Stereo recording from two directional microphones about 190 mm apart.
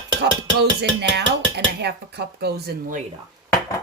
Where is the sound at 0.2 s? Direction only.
60° right (ahead or behind).